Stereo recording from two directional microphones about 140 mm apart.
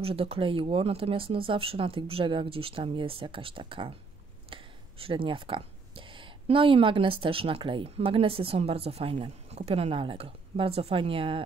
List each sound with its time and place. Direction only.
0.0 s speech: 40° right (ahead or behind)